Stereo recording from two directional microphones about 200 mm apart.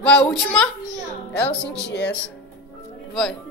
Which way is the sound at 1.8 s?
55° left (ahead or behind).